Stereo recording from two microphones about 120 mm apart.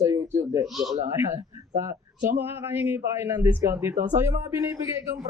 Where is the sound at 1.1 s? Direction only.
20° right (ahead or behind).